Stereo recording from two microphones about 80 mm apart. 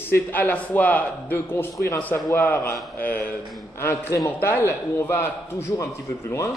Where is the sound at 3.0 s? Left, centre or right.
Centre.